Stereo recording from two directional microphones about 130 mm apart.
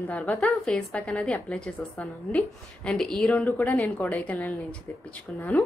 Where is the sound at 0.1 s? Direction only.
5° left (ahead or behind).